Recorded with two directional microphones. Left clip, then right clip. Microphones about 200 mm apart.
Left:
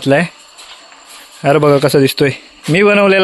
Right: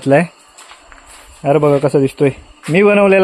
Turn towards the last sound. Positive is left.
turn(degrees=5)  # may be behind; listen again after turning